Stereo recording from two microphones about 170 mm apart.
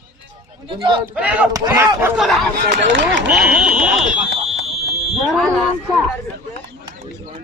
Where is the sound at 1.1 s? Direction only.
10° right (ahead or behind).